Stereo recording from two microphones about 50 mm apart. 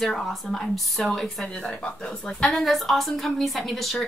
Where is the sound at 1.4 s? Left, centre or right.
Centre.